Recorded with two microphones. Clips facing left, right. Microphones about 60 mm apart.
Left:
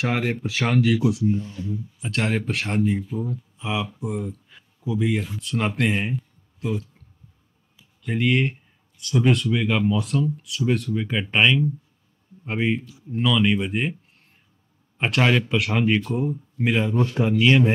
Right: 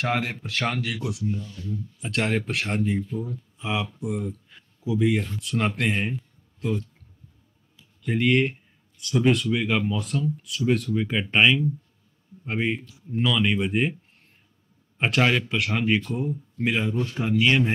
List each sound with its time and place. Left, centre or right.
0.0 s speech: centre
1.4 s speech: left
2.0 s speech: centre
8.0 s speech: centre
15.0 s speech: centre